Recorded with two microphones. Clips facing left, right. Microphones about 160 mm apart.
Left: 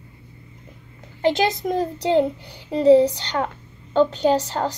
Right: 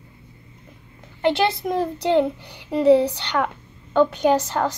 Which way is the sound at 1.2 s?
60° right (ahead or behind).